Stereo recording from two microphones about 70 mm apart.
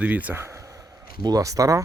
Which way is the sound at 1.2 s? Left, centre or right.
Right.